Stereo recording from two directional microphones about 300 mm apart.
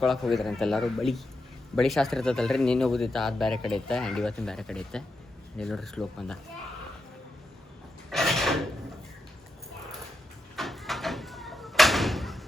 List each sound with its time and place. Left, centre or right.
0.0 s speech: centre
8.1 s a sound: centre
10.5 s door: centre